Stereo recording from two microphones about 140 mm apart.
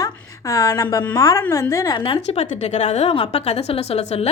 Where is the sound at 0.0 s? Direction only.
25° left (ahead or behind).